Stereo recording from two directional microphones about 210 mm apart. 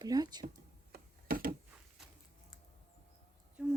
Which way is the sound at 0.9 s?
45° right (ahead or behind).